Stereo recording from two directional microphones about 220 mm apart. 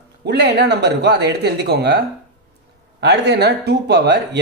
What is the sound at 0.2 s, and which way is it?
Speech, 50° right (ahead or behind).